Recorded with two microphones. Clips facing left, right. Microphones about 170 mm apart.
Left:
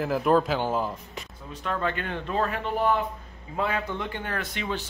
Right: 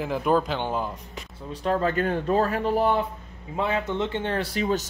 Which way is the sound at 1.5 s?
35° right (ahead or behind).